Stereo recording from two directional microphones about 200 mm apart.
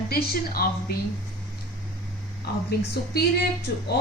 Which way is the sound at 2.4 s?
55° left (ahead or behind).